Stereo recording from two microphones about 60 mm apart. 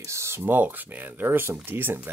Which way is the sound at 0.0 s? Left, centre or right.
Right.